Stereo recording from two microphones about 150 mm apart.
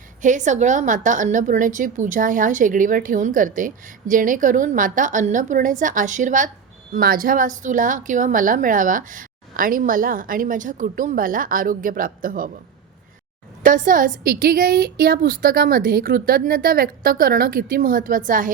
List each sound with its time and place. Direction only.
0.2 s a woman's voice: 55° right (ahead or behind)
6.9 s a woman's voice: 75° right (ahead or behind)
13.6 s a woman's voice: 65° right (ahead or behind)